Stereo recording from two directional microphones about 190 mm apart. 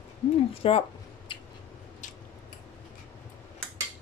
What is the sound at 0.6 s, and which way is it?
Speech, 30° left (ahead or behind).